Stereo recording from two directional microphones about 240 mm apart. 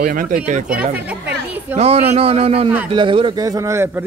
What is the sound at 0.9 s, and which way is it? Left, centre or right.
Chatter, centre.